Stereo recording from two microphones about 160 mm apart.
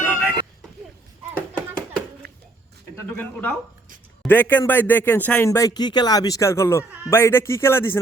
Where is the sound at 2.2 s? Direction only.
90° right.